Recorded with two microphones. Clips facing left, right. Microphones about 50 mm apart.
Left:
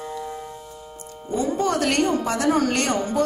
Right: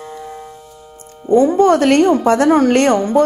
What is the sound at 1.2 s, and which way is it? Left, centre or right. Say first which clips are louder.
A woman's voice: right 12 dB; right.